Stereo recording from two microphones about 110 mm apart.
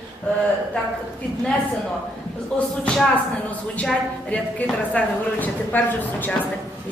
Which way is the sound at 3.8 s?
10° left (ahead or behind).